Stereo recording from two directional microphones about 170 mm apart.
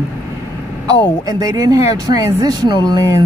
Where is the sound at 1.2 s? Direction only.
20° right (ahead or behind).